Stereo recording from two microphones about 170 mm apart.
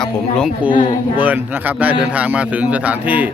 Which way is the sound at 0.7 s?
30° left (ahead or behind).